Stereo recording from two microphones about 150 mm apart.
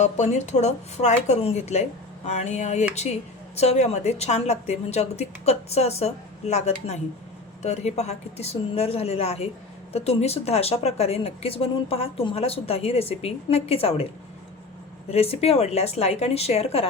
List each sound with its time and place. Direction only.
0.0 s speech: 50° left (ahead or behind)
15.1 s speech: 45° left (ahead or behind)